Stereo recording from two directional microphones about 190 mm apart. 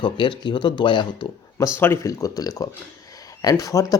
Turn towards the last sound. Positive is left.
turn(degrees=20)  # may be behind; listen again after turning